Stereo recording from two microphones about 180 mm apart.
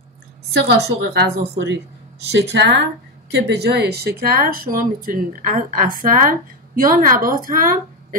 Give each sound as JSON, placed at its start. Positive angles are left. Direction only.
{"t": 0.5, "sound": "speech", "side_deg": -65}
{"t": 1.0, "sound": "speech", "side_deg": -80}
{"t": 3.3, "sound": "speech", "side_deg": -65}